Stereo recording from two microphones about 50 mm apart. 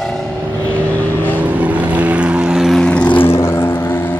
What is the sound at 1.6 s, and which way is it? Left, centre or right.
Vehicle, right.